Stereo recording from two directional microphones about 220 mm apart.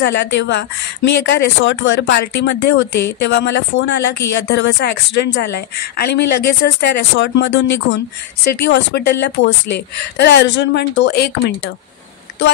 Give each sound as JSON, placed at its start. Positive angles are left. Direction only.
{"t": 0.0, "sound": "speech", "side_deg": 50}